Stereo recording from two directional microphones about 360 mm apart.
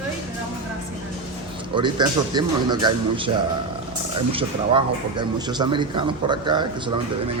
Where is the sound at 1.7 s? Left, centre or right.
Centre.